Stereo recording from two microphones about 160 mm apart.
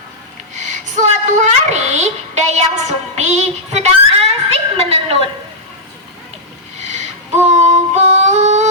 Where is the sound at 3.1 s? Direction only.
45° right (ahead or behind).